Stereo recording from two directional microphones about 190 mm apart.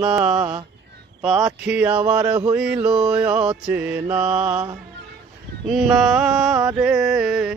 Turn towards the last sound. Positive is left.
turn(degrees=-5)  # may be behind; listen again after turning